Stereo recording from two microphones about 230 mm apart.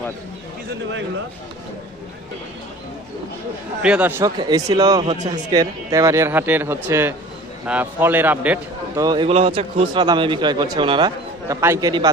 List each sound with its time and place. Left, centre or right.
3.8 s speech: centre
4.2 s speech: centre
9.0 s a man's voice: centre